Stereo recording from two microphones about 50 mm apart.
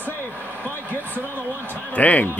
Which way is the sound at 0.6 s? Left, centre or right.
Left.